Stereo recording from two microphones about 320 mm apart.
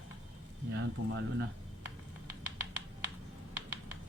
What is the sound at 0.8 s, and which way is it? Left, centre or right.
Speech, right.